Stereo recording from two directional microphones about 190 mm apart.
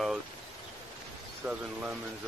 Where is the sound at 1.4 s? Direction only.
5° right (ahead or behind).